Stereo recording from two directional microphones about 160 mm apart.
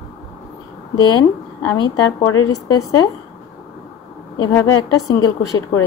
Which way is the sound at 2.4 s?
20° left (ahead or behind).